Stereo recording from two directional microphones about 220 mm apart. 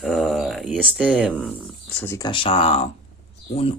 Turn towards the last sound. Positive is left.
turn(degrees=25)  # may be behind; listen again after turning